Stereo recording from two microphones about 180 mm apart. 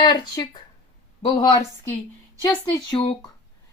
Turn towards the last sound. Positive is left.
turn(degrees=25)  # may be behind; listen again after turning